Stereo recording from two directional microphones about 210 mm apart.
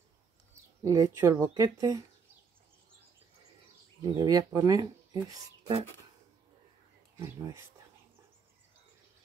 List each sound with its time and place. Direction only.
0.8 s speech: 15° right (ahead or behind)
4.0 s speech: 20° right (ahead or behind)
7.2 s speech: 15° right (ahead or behind)